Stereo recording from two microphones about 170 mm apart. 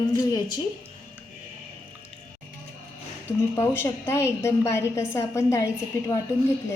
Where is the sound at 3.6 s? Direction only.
15° left (ahead or behind).